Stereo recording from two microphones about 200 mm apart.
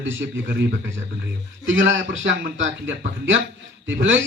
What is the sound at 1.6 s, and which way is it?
A man's voice, 70° right (ahead or behind).